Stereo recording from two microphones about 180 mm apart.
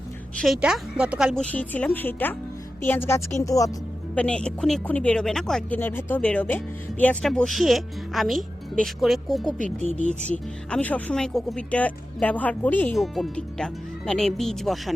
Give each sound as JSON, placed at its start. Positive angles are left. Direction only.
{"t": 0.4, "sound": "speech", "side_deg": 0}
{"t": 4.1, "sound": "speech", "side_deg": 5}
{"t": 9.6, "sound": "speech", "side_deg": -40}
{"t": 10.7, "sound": "speech", "side_deg": 10}